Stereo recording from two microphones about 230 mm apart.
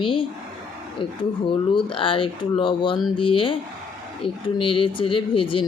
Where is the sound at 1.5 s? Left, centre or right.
Left.